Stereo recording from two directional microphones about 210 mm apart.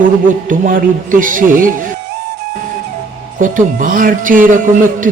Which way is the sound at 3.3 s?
40° right (ahead or behind).